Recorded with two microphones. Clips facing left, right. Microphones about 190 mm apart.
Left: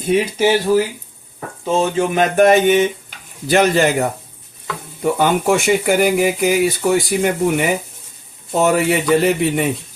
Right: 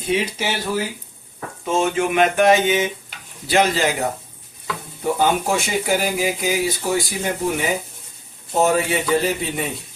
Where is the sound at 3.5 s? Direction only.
55° left (ahead or behind).